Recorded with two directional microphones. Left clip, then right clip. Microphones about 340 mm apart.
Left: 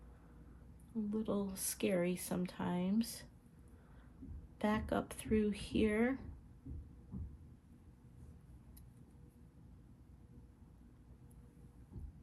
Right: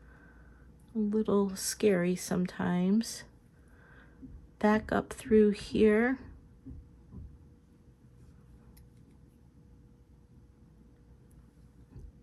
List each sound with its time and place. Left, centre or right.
1.1 s speech: right
4.5 s speech: centre